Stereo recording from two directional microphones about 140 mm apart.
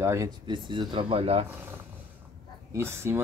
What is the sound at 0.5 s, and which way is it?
Speech, 35° right (ahead or behind).